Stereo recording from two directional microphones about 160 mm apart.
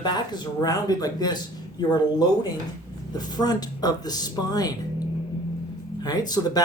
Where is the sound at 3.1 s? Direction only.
25° left (ahead or behind).